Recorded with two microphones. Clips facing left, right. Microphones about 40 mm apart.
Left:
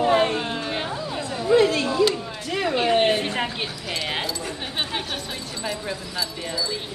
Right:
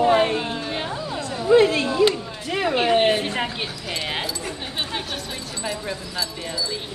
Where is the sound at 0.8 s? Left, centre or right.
Centre.